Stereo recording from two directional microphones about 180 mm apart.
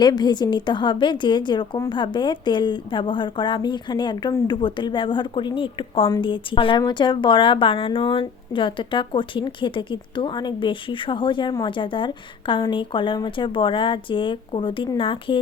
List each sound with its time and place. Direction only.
0.0 s a woman's voice: 25° left (ahead or behind)